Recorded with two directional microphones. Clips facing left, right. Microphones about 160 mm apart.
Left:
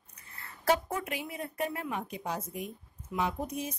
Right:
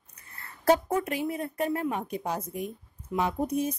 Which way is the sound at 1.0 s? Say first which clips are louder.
Right 7 dB; 40° right (ahead or behind).